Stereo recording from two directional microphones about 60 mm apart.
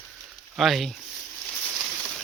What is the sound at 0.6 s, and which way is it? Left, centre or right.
Speech, centre.